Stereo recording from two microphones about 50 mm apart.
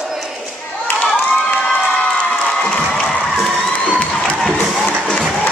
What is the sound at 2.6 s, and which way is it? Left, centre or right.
Music, centre.